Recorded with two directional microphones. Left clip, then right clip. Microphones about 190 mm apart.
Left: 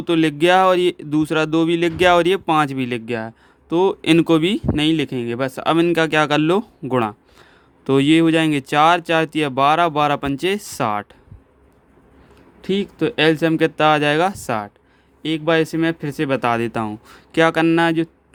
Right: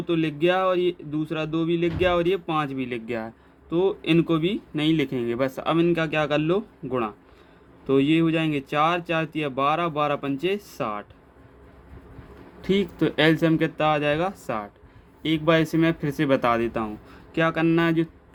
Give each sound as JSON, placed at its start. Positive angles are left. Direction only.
{"t": 0.0, "sound": "speech", "side_deg": 60}
{"t": 3.7, "sound": "speech", "side_deg": 55}
{"t": 12.6, "sound": "speech", "side_deg": 30}
{"t": 13.7, "sound": "speech", "side_deg": 50}
{"t": 15.2, "sound": "speech", "side_deg": 30}
{"t": 17.3, "sound": "speech", "side_deg": 55}